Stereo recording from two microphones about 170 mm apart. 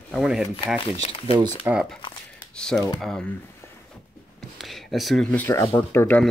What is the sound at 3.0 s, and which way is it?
Speech, 5° left (ahead or behind).